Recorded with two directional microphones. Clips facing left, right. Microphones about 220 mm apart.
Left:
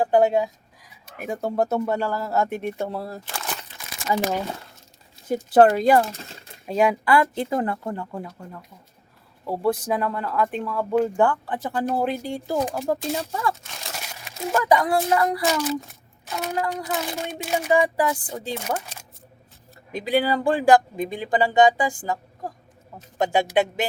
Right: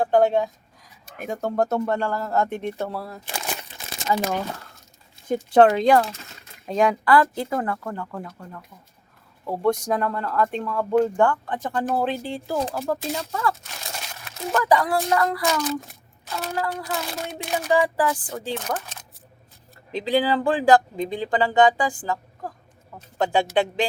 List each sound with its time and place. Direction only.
0.0 s speech: 10° left (ahead or behind)
3.2 s a sound: 15° right (ahead or behind)
4.1 s speech: 20° left (ahead or behind)
5.3 s speech: 5° left (ahead or behind)
7.2 s speech: 20° left (ahead or behind)
9.5 s speech: 5° left (ahead or behind); by 13.6 s 20° left (ahead or behind)
13.9 s crumpling: 10° left (ahead or behind)
14.6 s speech: 20° left (ahead or behind)
15.4 s speech: 5° left (ahead or behind)
16.3 s speech: 15° left (ahead or behind)
17.4 s speech: 10° left (ahead or behind)
17.7 s speech: 20° left (ahead or behind)
18.3 s speech: 10° left (ahead or behind)
20.1 s speech: 10° left (ahead or behind)